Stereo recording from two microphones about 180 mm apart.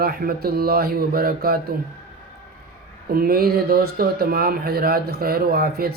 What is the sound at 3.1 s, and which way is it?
Speech, 55° right (ahead or behind).